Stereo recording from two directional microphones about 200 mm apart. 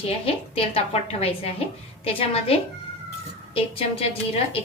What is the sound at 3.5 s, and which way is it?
A woman's voice, 30° left (ahead or behind).